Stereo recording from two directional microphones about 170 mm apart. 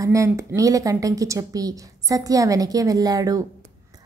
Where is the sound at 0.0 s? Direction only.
20° right (ahead or behind).